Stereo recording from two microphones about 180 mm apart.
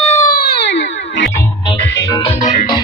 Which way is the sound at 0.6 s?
80° left.